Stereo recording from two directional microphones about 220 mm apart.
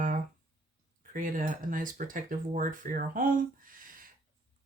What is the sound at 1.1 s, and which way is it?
Speech, 40° right (ahead or behind).